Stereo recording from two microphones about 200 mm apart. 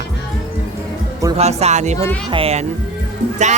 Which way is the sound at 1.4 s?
35° right (ahead or behind).